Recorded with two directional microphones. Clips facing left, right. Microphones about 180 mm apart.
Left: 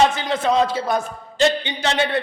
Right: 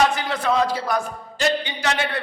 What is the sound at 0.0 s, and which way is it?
A man's voice, 25° left (ahead or behind).